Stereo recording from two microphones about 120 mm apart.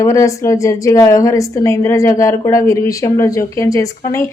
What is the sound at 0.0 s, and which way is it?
A woman's voice, 25° left (ahead or behind).